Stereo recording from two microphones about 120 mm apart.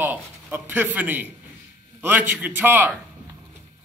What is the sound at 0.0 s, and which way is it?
A man's voice, 15° right (ahead or behind).